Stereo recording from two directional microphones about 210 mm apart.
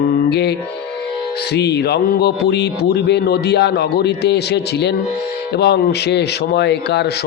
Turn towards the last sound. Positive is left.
turn(degrees=55)  # may be behind; listen again after turning